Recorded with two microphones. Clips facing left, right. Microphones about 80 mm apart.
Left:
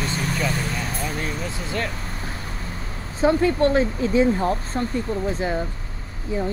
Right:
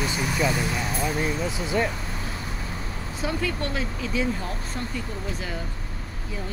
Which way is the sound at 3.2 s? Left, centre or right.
Left.